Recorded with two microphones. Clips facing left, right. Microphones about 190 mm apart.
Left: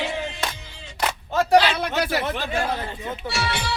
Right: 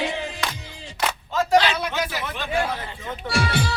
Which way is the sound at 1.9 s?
60° left (ahead or behind).